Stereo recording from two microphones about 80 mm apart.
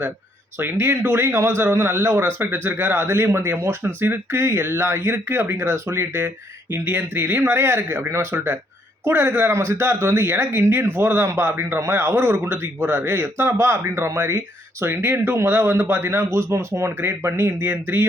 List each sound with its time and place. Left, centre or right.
0.6 s a man's voice: right